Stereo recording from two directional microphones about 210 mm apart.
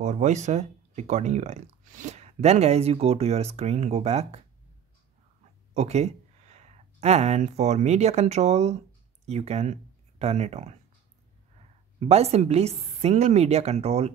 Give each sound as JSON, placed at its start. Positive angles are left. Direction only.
{"t": 0.0, "sound": "speech", "side_deg": -35}
{"t": 5.8, "sound": "speech", "side_deg": -30}
{"t": 12.0, "sound": "a woman's voice", "side_deg": -30}